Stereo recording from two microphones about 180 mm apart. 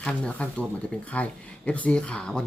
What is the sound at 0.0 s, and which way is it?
Speech, 5° left (ahead or behind).